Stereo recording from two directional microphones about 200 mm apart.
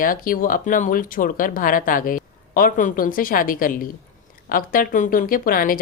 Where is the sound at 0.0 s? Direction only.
45° left (ahead or behind).